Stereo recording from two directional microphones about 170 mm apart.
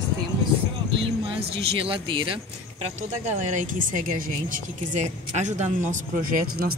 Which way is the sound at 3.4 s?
45° right (ahead or behind).